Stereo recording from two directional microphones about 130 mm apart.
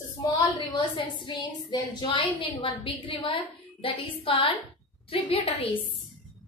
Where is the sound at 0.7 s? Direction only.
35° left (ahead or behind).